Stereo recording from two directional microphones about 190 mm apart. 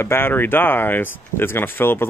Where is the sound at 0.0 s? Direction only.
10° left (ahead or behind).